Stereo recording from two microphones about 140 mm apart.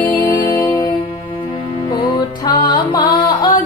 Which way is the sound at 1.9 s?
30° left (ahead or behind).